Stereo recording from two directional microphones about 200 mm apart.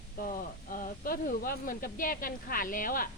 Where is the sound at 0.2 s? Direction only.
45° left (ahead or behind).